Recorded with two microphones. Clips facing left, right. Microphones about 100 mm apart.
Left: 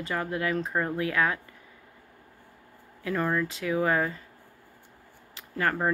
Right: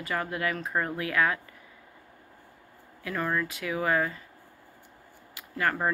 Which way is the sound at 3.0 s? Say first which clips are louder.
Left 2 dB; 30° left (ahead or behind).